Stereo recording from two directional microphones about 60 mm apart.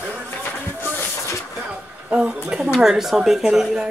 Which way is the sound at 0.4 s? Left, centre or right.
Left.